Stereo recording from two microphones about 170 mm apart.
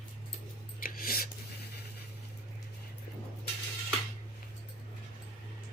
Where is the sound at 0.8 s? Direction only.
60° left (ahead or behind).